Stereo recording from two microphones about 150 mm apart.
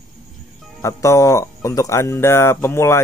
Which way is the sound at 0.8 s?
20° left (ahead or behind).